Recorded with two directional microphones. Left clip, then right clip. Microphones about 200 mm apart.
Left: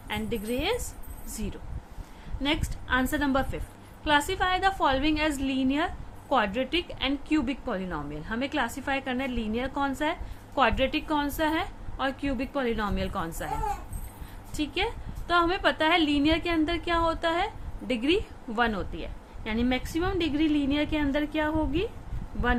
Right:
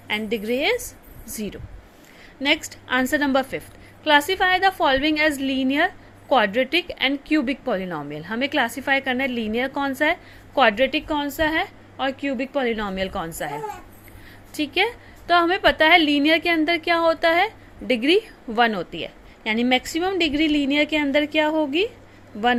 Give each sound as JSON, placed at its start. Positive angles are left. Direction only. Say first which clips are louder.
{"t": 0.1, "sound": "a woman's voice", "louder": "right 8 dB", "side_deg": -20}
{"t": 14.5, "sound": "a woman's voice", "louder": "right 8 dB", "side_deg": -20}